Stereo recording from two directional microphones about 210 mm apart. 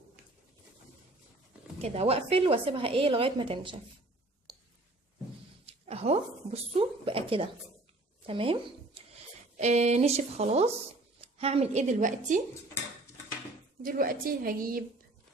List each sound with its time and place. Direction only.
1.8 s a woman's voice: 30° right (ahead or behind)
5.6 s a woman's voice: 30° right (ahead or behind)
9.6 s speech: 30° right (ahead or behind)
13.8 s a woman's voice: 45° right (ahead or behind)